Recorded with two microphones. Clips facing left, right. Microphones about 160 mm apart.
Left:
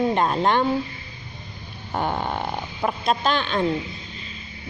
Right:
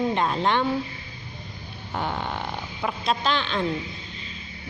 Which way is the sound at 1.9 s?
45° left (ahead or behind).